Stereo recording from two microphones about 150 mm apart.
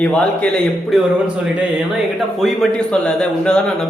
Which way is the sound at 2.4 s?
5° left (ahead or behind).